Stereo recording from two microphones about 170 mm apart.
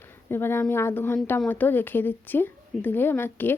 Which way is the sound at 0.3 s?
15° left (ahead or behind).